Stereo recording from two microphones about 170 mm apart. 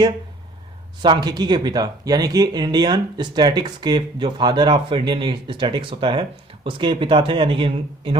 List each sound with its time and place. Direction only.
1.0 s speech: 25° right (ahead or behind)